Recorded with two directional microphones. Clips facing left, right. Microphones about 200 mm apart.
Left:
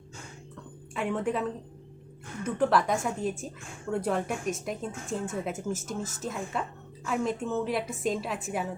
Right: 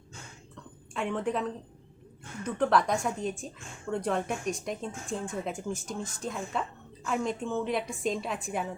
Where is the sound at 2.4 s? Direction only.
5° left (ahead or behind).